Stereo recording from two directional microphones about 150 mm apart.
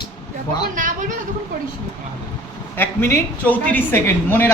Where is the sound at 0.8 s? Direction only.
60° right (ahead or behind).